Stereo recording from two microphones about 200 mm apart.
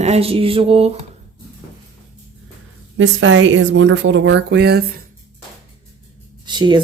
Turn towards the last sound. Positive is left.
turn(degrees=-20)  # may be behind; listen again after turning